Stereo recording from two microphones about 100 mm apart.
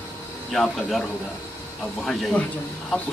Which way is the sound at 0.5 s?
5° left (ahead or behind).